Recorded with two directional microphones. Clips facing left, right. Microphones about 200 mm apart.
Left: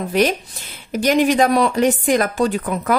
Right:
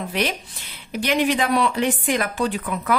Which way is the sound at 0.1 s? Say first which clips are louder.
Left 10 dB; 45° left (ahead or behind).